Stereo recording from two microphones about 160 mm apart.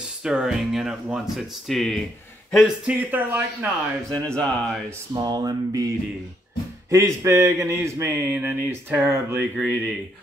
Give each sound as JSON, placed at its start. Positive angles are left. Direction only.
{"t": 0.2, "sound": "speech", "side_deg": -5}
{"t": 4.1, "sound": "speech", "side_deg": 5}
{"t": 5.1, "sound": "speech", "side_deg": -25}
{"t": 6.9, "sound": "speech", "side_deg": -20}